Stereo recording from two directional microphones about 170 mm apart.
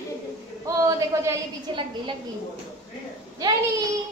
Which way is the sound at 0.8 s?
20° right (ahead or behind).